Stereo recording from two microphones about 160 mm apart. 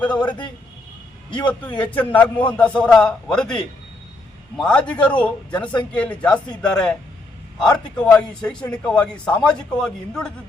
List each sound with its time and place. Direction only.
0.2 s a man's voice: 30° left (ahead or behind)
1.8 s a man's voice: 10° left (ahead or behind)
7.9 s a man's voice: 5° left (ahead or behind)